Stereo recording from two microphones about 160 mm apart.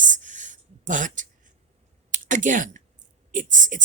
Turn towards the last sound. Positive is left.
turn(degrees=-55)  # may be behind; listen again after turning